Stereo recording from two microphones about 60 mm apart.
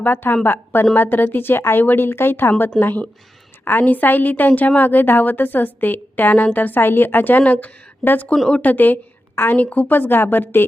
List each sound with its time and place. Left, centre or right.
0.0 s a woman's voice: left
9.6 s a woman's voice: left